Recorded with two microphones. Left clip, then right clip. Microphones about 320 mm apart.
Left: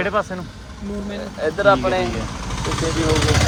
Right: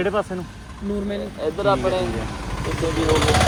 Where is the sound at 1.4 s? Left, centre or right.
Left.